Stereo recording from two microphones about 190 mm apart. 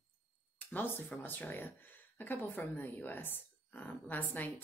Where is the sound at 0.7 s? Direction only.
10° left (ahead or behind).